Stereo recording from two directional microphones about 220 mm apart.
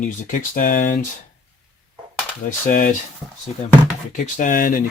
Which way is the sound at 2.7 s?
40° left (ahead or behind).